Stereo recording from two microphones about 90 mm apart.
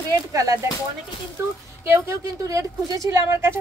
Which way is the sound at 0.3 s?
40° right (ahead or behind).